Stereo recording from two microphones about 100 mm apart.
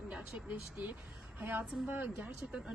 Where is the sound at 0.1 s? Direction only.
10° right (ahead or behind).